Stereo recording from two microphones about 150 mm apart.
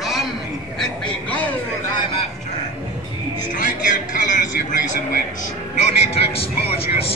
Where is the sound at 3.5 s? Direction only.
60° left (ahead or behind).